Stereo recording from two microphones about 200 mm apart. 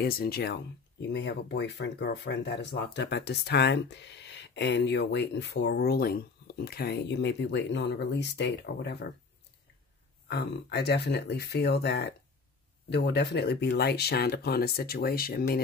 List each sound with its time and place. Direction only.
0.0 s speech: 50° left (ahead or behind)
10.2 s speech: 55° left (ahead or behind)